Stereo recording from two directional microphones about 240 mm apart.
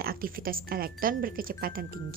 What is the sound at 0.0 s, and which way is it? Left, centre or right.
A woman's voice, right.